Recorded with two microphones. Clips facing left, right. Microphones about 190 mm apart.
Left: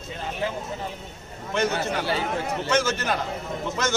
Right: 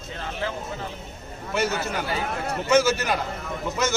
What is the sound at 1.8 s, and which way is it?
Speech, 30° left (ahead or behind).